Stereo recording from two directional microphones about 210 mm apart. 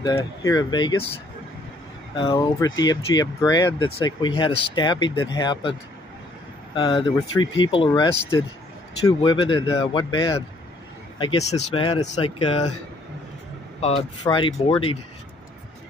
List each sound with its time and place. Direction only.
0.0 s speech: 15° left (ahead or behind)
2.1 s speech: 20° left (ahead or behind)
13.7 s speech: 30° left (ahead or behind)